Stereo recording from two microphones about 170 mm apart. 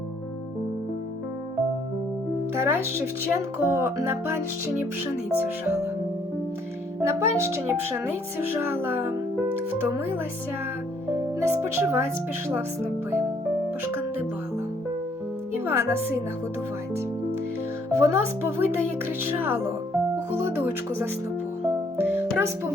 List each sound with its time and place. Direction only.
2.6 s speech: 15° right (ahead or behind)
7.0 s speech: 15° right (ahead or behind)
11.3 s speech: 15° right (ahead or behind)
15.6 s speech: 15° right (ahead or behind)
17.9 s speech: 15° right (ahead or behind)
21.9 s music: 15° right (ahead or behind)